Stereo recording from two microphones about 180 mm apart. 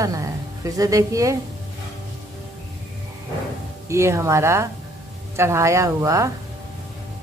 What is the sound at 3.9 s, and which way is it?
A woman's voice, 15° right (ahead or behind).